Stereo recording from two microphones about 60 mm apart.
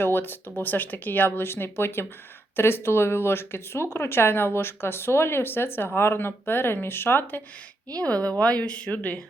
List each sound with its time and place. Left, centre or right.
0.0 s speech: left
7.9 s a woman's voice: left